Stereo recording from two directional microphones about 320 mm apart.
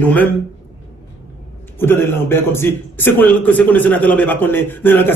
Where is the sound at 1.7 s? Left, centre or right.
Centre.